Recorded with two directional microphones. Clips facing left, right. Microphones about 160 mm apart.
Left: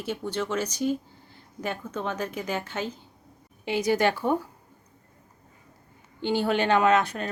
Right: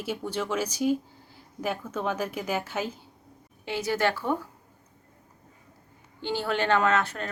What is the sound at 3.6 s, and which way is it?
Speech, 15° left (ahead or behind).